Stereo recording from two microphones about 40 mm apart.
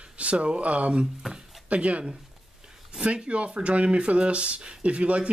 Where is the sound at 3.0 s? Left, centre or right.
Right.